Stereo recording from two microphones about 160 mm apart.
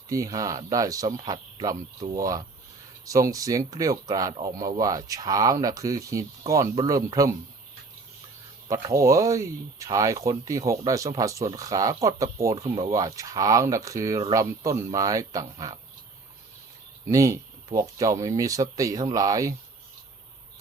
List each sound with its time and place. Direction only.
0.1 s speech: 20° right (ahead or behind)
8.7 s speech: 20° right (ahead or behind)
17.1 s speech: 20° right (ahead or behind)